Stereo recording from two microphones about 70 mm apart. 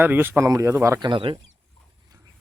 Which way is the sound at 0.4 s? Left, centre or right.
Right.